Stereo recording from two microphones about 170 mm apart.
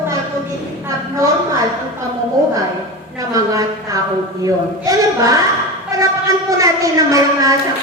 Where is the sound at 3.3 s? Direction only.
20° right (ahead or behind).